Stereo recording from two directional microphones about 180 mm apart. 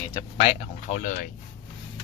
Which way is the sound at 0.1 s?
20° left (ahead or behind).